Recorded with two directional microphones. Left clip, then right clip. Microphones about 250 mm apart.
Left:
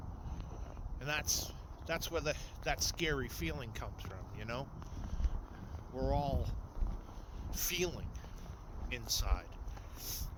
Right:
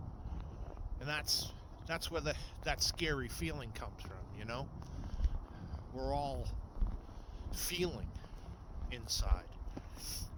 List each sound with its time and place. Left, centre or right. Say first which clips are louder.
0.9 s speech: even; centre
6.0 s speech: left 2 dB; centre
7.5 s speech: left 1 dB; centre